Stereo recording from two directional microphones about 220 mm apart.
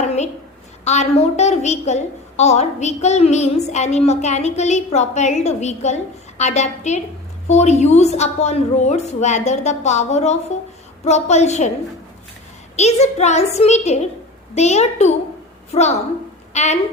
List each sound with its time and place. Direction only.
0.9 s a woman's voice: 30° left (ahead or behind)
12.7 s a woman's voice: 30° left (ahead or behind)